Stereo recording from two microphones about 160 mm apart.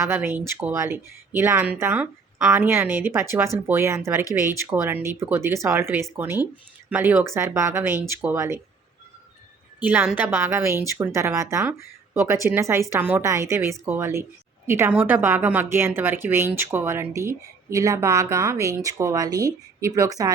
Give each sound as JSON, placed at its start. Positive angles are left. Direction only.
{"t": 0.0, "sound": "a woman's voice", "side_deg": -15}
{"t": 9.8, "sound": "a woman's voice", "side_deg": -10}